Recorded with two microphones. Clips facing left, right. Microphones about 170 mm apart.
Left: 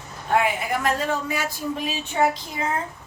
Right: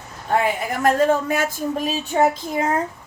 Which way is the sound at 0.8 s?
45° right (ahead or behind).